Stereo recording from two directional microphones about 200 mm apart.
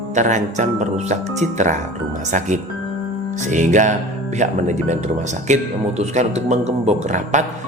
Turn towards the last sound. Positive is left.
turn(degrees=-35)  # may be behind; listen again after turning